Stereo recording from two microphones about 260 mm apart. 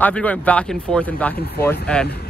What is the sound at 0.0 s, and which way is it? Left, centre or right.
Speech, centre.